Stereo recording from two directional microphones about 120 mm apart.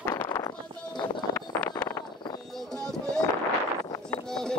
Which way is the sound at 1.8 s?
20° left (ahead or behind).